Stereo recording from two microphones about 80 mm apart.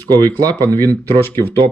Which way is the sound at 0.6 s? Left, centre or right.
Right.